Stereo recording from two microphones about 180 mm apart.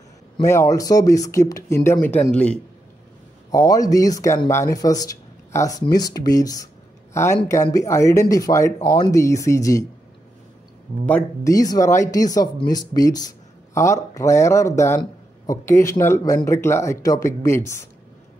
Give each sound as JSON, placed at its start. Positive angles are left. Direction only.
{"t": 0.4, "sound": "speech", "side_deg": 15}
{"t": 3.5, "sound": "speech", "side_deg": 20}
{"t": 11.1, "sound": "speech", "side_deg": 15}